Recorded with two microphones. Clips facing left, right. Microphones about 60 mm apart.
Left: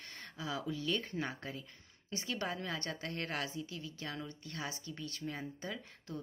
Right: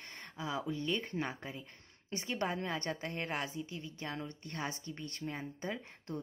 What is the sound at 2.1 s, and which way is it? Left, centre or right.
A woman's voice, right.